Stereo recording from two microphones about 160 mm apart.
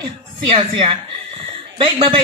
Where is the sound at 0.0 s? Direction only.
35° right (ahead or behind).